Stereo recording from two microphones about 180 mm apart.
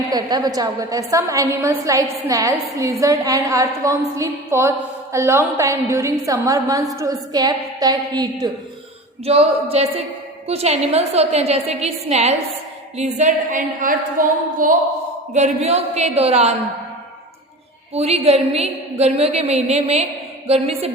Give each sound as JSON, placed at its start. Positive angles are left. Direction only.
{"t": 0.1, "sound": "a woman's voice", "side_deg": -20}
{"t": 9.2, "sound": "a woman's voice", "side_deg": -35}
{"t": 17.9, "sound": "a woman's voice", "side_deg": -35}